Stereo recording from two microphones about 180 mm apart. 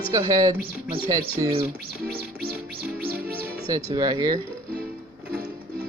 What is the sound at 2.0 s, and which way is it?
Music, 60° right (ahead or behind).